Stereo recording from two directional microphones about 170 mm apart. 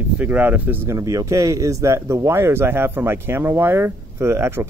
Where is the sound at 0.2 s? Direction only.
10° right (ahead or behind).